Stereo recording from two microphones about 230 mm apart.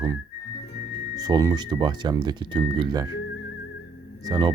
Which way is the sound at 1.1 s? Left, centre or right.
Centre.